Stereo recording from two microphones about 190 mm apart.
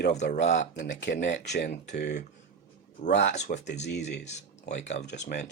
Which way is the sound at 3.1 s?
65° left (ahead or behind).